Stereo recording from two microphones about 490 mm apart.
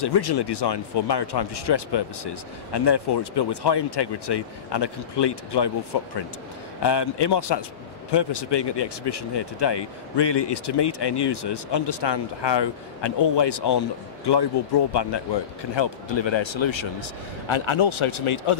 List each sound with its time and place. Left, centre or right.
0.0 s speech: left